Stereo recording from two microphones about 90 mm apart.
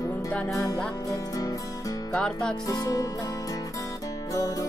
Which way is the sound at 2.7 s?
40° left (ahead or behind).